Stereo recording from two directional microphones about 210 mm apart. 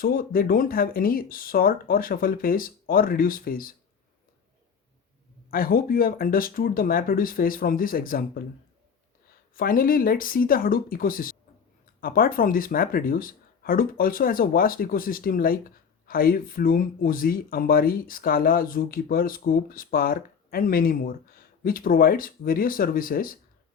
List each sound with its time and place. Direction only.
0.0 s speech: 45° left (ahead or behind)
5.5 s speech: 45° left (ahead or behind)
9.6 s speech: 45° left (ahead or behind)